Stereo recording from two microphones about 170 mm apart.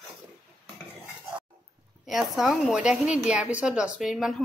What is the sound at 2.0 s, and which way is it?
Speech, centre (ahead or behind).